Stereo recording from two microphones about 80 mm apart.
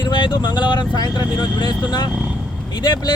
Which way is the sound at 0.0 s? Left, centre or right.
Left.